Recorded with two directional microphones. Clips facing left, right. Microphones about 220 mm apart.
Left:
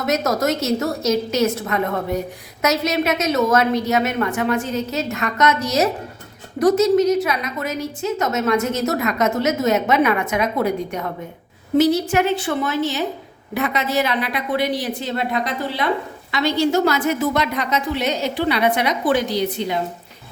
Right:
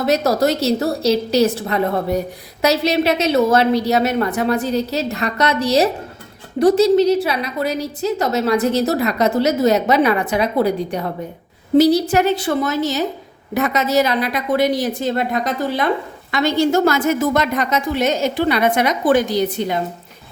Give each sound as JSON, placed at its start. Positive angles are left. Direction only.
{"t": 0.0, "sound": "a woman's voice", "side_deg": -30}